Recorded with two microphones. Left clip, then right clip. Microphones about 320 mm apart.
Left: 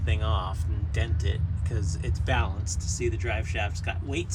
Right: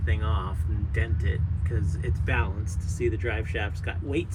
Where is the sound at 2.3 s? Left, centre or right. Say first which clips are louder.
Left 1 dB; centre.